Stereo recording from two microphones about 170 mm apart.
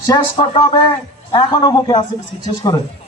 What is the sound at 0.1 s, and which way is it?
A man's voice, 30° left (ahead or behind).